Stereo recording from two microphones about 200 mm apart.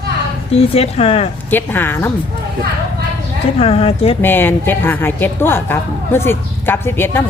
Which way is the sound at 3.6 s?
30° left (ahead or behind).